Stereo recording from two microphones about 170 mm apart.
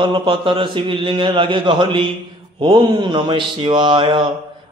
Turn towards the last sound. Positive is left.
turn(degrees=-30)  # may be behind; listen again after turning